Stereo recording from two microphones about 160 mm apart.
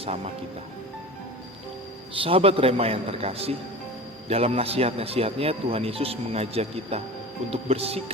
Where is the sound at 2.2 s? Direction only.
35° right (ahead or behind).